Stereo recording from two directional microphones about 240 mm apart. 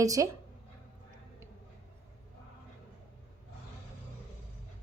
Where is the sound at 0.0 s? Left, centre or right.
Centre.